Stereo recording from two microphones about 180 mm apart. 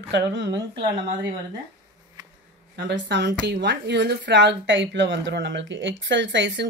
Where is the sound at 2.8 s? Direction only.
75° right (ahead or behind).